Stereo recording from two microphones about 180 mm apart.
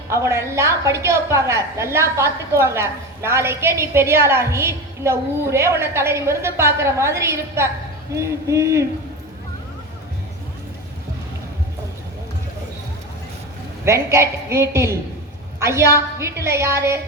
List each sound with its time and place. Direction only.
0.1 s a woman's voice: 15° right (ahead or behind)
13.8 s a woman's voice: 15° right (ahead or behind)